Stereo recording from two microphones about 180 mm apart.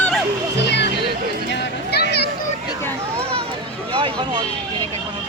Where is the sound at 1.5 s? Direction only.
70° left (ahead or behind).